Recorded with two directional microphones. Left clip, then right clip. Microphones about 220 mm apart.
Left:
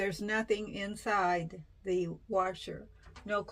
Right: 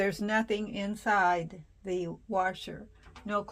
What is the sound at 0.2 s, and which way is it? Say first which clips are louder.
Speech: right 3 dB; 45° right (ahead or behind).